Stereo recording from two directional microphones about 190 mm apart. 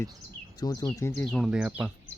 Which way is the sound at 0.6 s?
20° left (ahead or behind).